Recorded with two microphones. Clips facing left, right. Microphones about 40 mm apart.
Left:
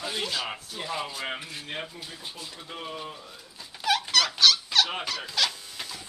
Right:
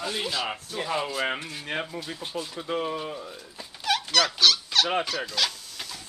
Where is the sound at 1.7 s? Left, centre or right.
Right.